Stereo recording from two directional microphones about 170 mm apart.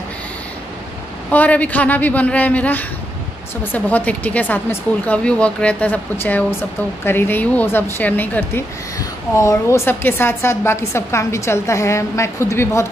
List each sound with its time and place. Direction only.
1.3 s a woman's voice: 10° left (ahead or behind)